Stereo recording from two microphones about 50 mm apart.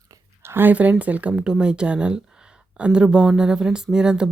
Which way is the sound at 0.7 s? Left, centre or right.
Right.